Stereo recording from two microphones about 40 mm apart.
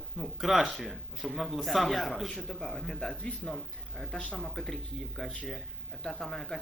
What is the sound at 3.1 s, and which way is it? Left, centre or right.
Speech, left.